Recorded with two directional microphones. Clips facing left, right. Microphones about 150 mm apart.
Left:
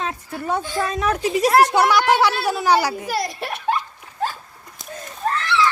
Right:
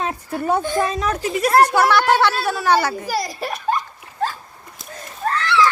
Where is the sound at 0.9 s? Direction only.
10° left (ahead or behind).